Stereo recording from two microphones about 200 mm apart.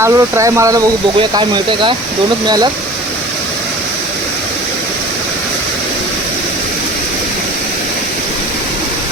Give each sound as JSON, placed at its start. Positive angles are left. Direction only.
{"t": 0.0, "sound": "speech", "side_deg": -15}